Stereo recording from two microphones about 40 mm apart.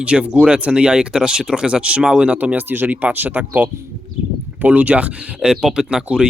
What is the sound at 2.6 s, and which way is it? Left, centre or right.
Speech, right.